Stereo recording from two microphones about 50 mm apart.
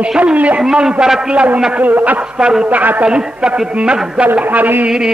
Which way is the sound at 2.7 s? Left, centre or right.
Right.